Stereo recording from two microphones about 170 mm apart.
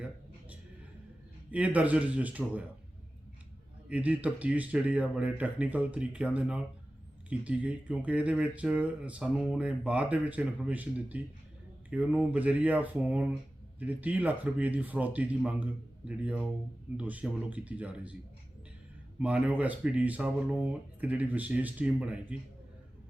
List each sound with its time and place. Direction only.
1.5 s speech: 10° right (ahead or behind)
3.8 s speech: 10° right (ahead or behind)
19.2 s speech: 10° right (ahead or behind)